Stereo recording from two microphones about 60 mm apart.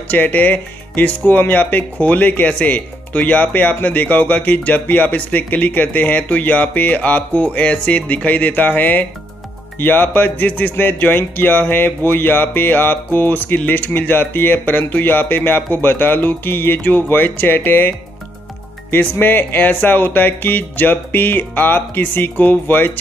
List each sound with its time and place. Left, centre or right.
0.1 s speech: left